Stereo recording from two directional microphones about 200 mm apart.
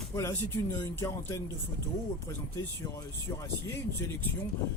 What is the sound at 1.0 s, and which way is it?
Speech, 15° left (ahead or behind).